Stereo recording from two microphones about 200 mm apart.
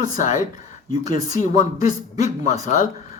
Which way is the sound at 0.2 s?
40° left (ahead or behind).